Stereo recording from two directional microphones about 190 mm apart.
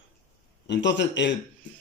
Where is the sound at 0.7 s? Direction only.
65° left (ahead or behind).